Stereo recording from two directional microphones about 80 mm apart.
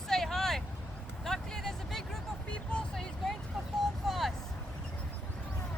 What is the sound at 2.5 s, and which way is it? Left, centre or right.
Music, centre.